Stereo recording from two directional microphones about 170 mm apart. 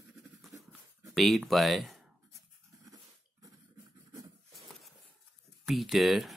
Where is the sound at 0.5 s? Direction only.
20° right (ahead or behind).